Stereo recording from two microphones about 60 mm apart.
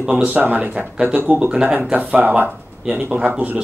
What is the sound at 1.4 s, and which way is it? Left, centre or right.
Speech, centre.